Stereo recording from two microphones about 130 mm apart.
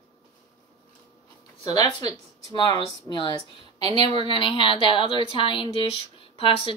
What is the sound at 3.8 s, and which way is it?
Speech, 50° right (ahead or behind).